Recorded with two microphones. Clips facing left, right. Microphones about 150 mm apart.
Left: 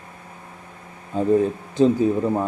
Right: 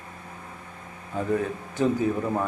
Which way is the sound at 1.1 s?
25° left (ahead or behind).